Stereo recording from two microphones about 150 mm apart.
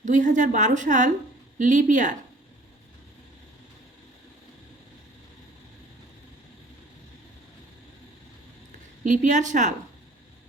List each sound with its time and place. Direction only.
0.0 s a woman's voice: 55° right (ahead or behind)
9.0 s a woman's voice: 55° right (ahead or behind)